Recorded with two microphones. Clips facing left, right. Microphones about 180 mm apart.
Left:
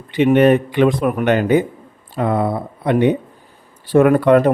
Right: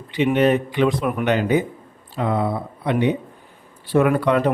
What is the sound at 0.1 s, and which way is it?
Speech, 55° left (ahead or behind).